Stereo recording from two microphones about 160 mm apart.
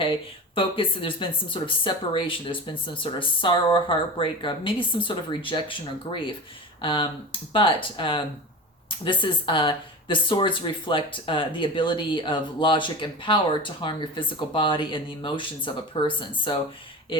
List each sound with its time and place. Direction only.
0.0 s speech: 35° left (ahead or behind)